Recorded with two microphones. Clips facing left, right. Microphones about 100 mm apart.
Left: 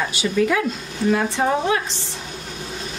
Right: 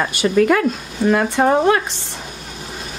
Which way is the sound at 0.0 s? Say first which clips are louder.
Right 5 dB; 55° right (ahead or behind).